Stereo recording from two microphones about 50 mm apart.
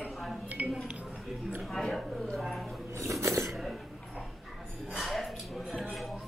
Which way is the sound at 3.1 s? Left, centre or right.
Right.